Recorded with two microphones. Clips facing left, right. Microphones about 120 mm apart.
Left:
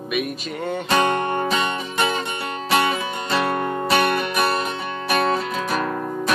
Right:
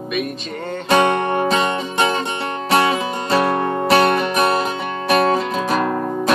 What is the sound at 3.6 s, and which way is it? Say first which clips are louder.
Music: right 5 dB; 35° right (ahead or behind).